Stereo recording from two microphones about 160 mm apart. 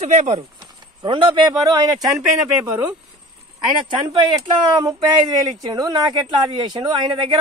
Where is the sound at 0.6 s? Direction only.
30° right (ahead or behind).